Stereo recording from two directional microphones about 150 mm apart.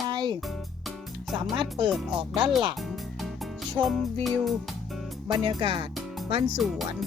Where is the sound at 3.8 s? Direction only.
15° right (ahead or behind).